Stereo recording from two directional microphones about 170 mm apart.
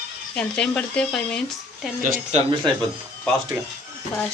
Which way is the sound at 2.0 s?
45° right (ahead or behind).